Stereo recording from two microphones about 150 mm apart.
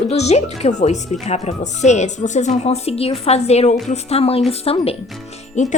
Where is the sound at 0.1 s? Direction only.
45° left (ahead or behind).